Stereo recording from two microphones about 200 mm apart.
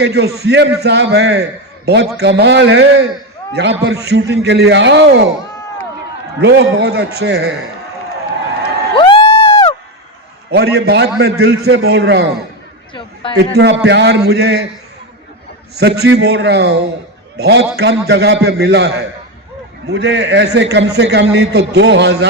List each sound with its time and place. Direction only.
0.0 s a man's voice: 55° right (ahead or behind)
6.4 s a man's voice: 60° right (ahead or behind)
9.0 s crowd: 25° left (ahead or behind)
10.5 s a man's voice: 55° right (ahead or behind)
12.9 s chatter: 25° left (ahead or behind)
13.3 s a man's voice: 55° right (ahead or behind)
15.7 s a man's voice: 55° right (ahead or behind)
19.9 s a man's voice: 60° right (ahead or behind)